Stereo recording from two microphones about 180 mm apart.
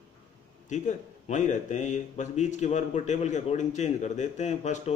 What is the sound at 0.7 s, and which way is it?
Speech, 40° left (ahead or behind).